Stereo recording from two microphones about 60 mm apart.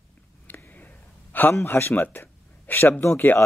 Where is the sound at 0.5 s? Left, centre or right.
Left.